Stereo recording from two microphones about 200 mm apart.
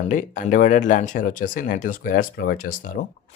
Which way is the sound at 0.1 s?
40° left (ahead or behind).